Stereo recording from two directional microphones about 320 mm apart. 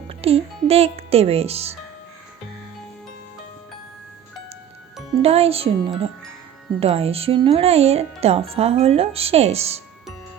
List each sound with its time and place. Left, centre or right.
0.1 s speech: centre
5.2 s speech: centre